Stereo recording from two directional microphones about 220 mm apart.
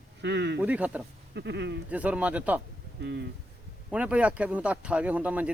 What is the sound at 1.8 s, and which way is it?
Speech, 5° right (ahead or behind).